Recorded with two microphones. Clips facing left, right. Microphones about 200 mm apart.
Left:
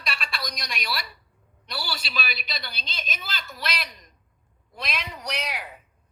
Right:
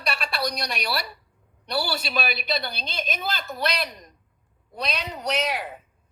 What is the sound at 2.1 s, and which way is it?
A woman's voice, 55° right (ahead or behind).